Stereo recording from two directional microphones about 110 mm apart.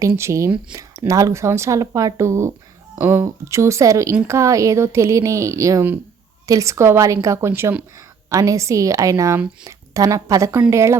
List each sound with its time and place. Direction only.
0.0 s a woman's voice: 25° right (ahead or behind)